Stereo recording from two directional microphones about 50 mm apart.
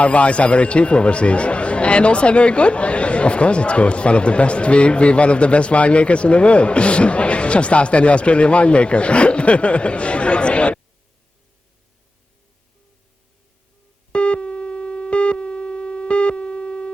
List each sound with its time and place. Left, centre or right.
0.0 s speech: left
14.1 s busy signal: left